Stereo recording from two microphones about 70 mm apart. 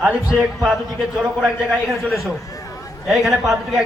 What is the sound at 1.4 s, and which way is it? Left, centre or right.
A man's voice, centre.